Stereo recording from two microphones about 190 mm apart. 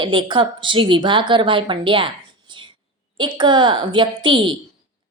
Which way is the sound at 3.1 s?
25° right (ahead or behind).